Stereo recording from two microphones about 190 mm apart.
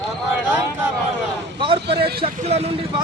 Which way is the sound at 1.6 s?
25° right (ahead or behind).